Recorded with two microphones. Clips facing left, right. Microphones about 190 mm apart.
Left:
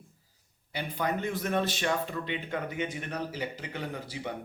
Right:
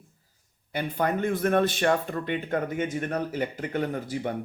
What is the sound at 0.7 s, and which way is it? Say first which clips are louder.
Speech: right 5 dB; 50° right (ahead or behind).